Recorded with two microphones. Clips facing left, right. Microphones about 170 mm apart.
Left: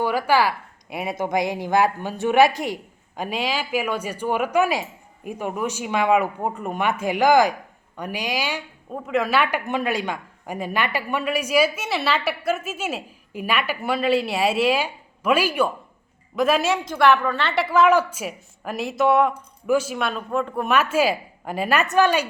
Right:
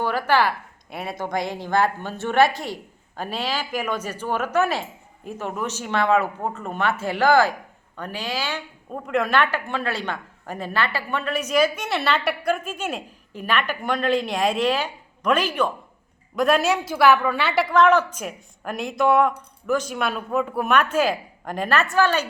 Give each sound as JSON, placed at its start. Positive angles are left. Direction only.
{"t": 0.0, "sound": "a sound", "side_deg": 10}
{"t": 1.2, "sound": "speech", "side_deg": 15}
{"t": 8.9, "sound": "a woman's voice", "side_deg": 0}